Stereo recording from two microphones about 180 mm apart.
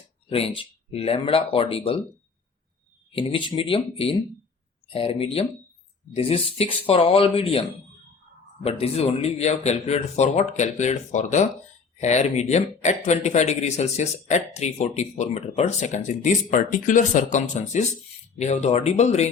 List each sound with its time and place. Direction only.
0.3 s speech: 35° left (ahead or behind)
3.1 s speech: 30° left (ahead or behind)
8.6 s speech: 35° left (ahead or behind)